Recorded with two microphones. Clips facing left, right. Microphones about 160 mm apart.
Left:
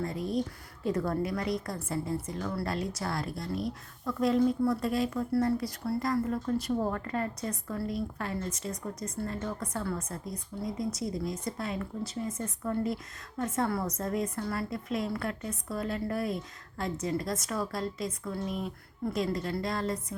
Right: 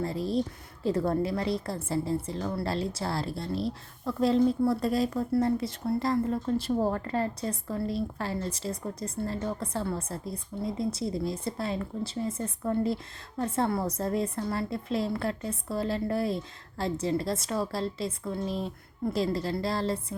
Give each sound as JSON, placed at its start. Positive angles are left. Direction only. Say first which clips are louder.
{"t": 0.0, "sound": "a woman's voice", "louder": "right 3 dB", "side_deg": -30}
{"t": 5.3, "sound": "speech", "louder": "right 2 dB", "side_deg": -25}